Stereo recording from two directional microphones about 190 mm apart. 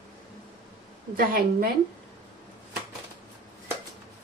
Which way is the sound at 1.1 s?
50° right (ahead or behind).